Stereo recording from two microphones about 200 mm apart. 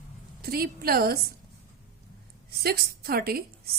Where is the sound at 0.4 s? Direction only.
50° right (ahead or behind).